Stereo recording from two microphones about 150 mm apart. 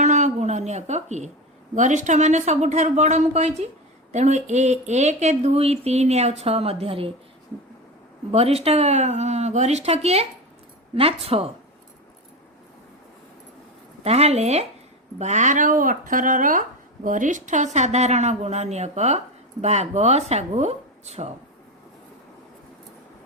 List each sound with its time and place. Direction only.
0.0 s a sound: 50° right (ahead or behind)
1.7 s speech: 55° right (ahead or behind); by 7.1 s 40° right (ahead or behind)
8.3 s speech: 40° right (ahead or behind)
14.0 s speech: 45° right (ahead or behind)